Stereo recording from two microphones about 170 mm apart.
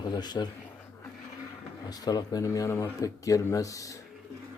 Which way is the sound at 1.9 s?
20° left (ahead or behind).